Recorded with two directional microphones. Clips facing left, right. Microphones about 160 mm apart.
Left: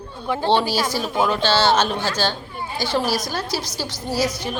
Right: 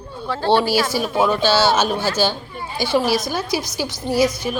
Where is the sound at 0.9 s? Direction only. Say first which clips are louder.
Right 3 dB; 10° right (ahead or behind).